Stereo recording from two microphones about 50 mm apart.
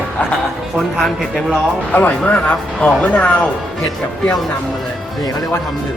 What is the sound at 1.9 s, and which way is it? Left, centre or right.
Speech, left.